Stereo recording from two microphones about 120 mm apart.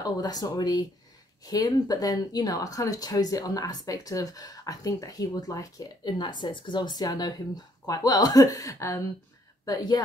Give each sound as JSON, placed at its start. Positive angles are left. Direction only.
{"t": 0.0, "sound": "a woman's voice", "side_deg": 35}